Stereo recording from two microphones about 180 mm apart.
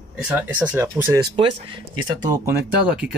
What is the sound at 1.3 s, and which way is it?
Speech, 25° right (ahead or behind).